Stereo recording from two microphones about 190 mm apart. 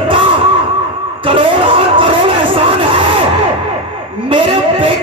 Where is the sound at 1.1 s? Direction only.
25° right (ahead or behind).